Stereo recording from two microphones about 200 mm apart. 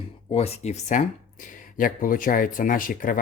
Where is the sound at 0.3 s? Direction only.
30° left (ahead or behind).